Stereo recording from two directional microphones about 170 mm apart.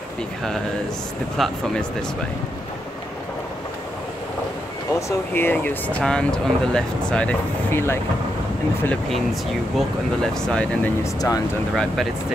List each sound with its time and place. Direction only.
1.4 s speech: 5° left (ahead or behind)
5.3 s speech: 10° left (ahead or behind)
8.8 s speech: centre (ahead or behind)
11.1 s speech: 20° left (ahead or behind)
11.7 s speech: 5° left (ahead or behind)